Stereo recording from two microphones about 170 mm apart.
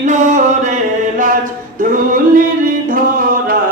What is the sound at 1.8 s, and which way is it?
Music, 55° right (ahead or behind).